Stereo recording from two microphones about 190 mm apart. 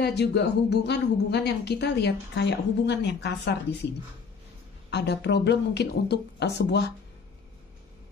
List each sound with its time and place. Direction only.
0.0 s a woman's voice: 60° left (ahead or behind)
4.9 s a woman's voice: 60° left (ahead or behind)